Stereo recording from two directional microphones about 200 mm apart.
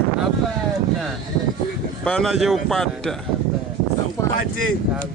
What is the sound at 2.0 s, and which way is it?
Speech, 5° left (ahead or behind).